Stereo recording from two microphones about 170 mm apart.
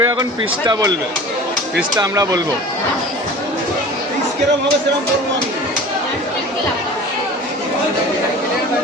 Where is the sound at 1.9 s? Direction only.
20° right (ahead or behind).